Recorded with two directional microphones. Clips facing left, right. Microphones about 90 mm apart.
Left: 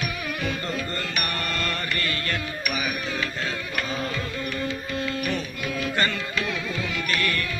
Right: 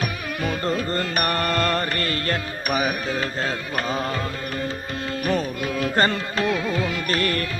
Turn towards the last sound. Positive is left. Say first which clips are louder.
# right 3 dB
turn(degrees=-40)  # may be behind; listen again after turning